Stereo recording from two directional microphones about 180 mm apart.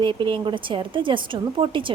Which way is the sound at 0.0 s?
25° right (ahead or behind).